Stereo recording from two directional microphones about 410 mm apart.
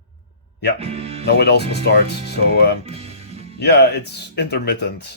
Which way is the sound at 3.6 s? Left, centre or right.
Left.